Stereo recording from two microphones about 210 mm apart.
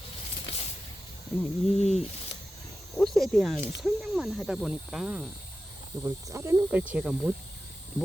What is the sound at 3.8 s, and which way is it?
Speech, centre (ahead or behind).